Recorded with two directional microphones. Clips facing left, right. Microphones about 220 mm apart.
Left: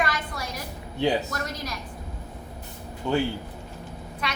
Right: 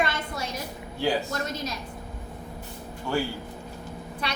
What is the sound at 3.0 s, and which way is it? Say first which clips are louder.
Speech: left 3 dB; 20° left (ahead or behind).